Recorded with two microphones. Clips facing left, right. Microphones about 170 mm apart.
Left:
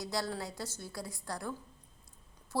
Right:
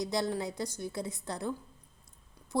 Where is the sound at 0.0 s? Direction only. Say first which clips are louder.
Right 5 dB; 20° right (ahead or behind).